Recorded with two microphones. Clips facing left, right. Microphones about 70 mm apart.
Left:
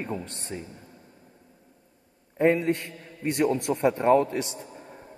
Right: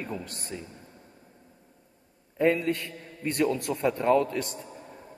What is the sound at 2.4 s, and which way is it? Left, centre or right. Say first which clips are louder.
A man's voice: left 2 dB; left.